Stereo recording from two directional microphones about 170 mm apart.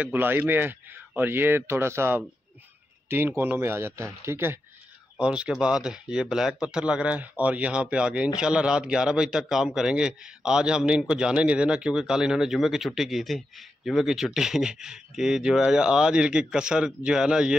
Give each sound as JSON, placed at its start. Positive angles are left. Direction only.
{"t": 0.0, "sound": "speech", "side_deg": -10}